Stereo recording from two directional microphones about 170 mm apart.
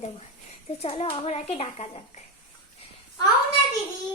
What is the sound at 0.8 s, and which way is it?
A child's voice, 35° left (ahead or behind).